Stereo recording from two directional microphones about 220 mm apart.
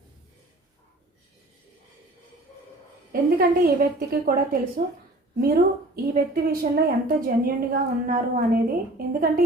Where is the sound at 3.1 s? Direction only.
40° right (ahead or behind).